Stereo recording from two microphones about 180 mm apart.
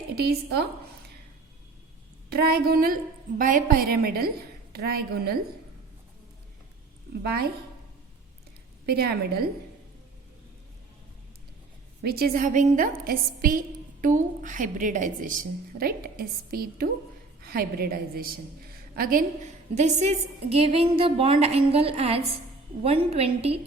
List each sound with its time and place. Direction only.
0.2 s a woman's voice: 60° right (ahead or behind)
2.3 s a woman's voice: 60° right (ahead or behind)
7.1 s a woman's voice: 60° right (ahead or behind)
8.9 s a woman's voice: 60° right (ahead or behind)
12.0 s a woman's voice: 60° right (ahead or behind); by 23.6 s 35° right (ahead or behind)